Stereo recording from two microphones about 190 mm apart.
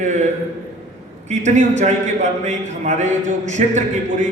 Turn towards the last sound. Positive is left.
turn(degrees=-40)  # may be behind; listen again after turning